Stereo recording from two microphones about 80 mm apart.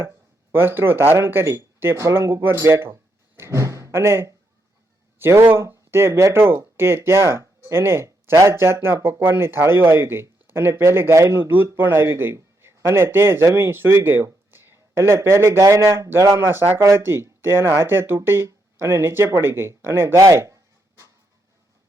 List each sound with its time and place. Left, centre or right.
0.5 s speech: right
2.6 s door: right
5.2 s speech: right
20.1 s speech: right